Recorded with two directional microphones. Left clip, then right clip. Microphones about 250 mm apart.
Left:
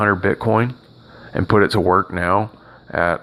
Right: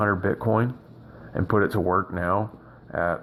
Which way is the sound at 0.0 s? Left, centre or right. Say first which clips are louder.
Left 6 dB; left.